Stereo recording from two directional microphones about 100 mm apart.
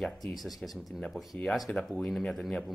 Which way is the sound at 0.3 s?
Centre (ahead or behind).